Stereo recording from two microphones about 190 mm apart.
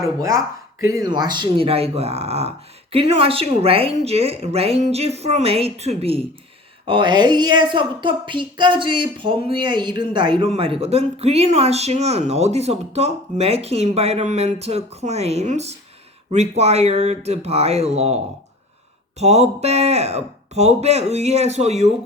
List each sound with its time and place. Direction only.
0.2 s a woman's voice: 15° right (ahead or behind); by 18.2 s 35° right (ahead or behind)
19.2 s a woman's voice: 35° right (ahead or behind)